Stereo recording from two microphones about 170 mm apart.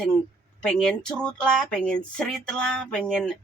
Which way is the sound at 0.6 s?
5° left (ahead or behind).